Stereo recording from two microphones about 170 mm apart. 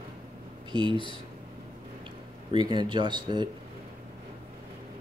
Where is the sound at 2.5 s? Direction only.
25° right (ahead or behind).